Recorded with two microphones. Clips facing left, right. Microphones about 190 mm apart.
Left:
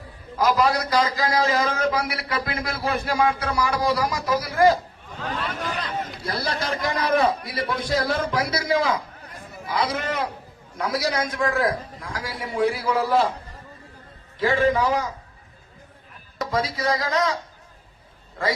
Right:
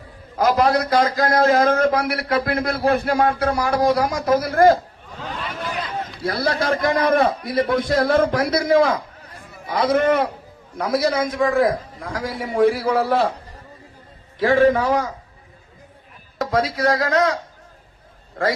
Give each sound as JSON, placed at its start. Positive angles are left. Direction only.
{"t": 0.3, "sound": "a man's voice", "side_deg": -55}
{"t": 6.2, "sound": "a man's voice", "side_deg": -60}
{"t": 14.4, "sound": "a man's voice", "side_deg": -60}
{"t": 16.4, "sound": "a man's voice", "side_deg": -60}